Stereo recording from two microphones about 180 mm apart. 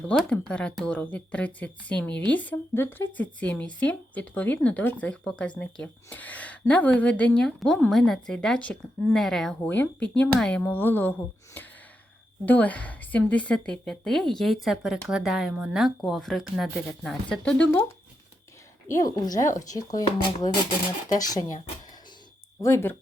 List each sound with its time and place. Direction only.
0.1 s speech: 5° left (ahead or behind)
12.5 s a woman's voice: 10° left (ahead or behind)
18.9 s speech: 20° left (ahead or behind)
22.6 s speech: 15° left (ahead or behind)